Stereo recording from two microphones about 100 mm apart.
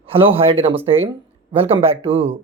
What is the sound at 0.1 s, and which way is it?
A man's voice, 65° right (ahead or behind).